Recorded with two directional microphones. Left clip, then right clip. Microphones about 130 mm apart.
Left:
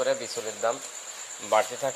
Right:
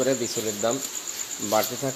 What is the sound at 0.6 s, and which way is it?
Speech, 15° right (ahead or behind).